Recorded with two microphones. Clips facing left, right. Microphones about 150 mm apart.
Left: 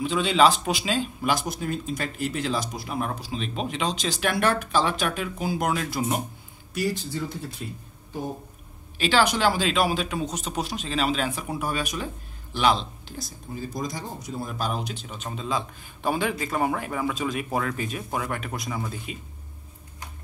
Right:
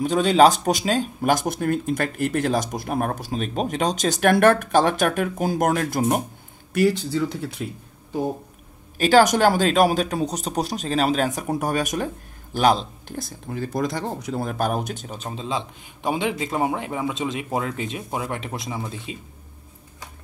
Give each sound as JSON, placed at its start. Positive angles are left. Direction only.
{"t": 0.0, "sound": "speech", "side_deg": -45}
{"t": 6.7, "sound": "speech", "side_deg": -70}
{"t": 8.9, "sound": "speech", "side_deg": -45}